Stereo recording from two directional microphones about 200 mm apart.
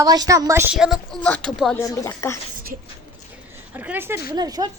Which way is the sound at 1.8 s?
15° left (ahead or behind).